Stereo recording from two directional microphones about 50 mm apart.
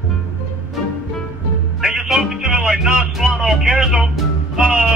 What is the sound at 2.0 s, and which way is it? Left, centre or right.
Music, centre.